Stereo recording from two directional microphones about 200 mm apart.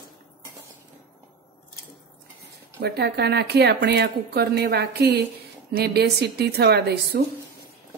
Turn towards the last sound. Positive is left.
turn(degrees=-55)  # may be behind; listen again after turning